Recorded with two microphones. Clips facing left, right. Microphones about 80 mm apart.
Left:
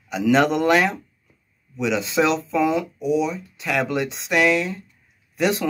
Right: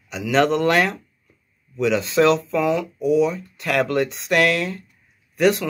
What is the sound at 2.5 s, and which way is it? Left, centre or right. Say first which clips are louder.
Speech: even; left.